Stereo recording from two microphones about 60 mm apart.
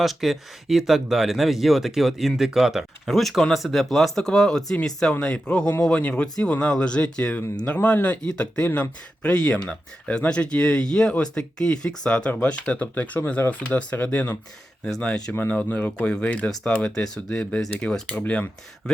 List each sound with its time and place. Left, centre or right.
0.0 s speech: centre; by 6.2 s left
6.2 s speech: centre